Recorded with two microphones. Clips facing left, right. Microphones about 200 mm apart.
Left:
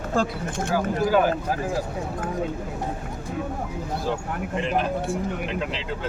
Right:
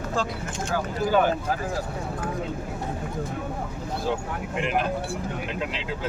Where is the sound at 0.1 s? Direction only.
50° left (ahead or behind).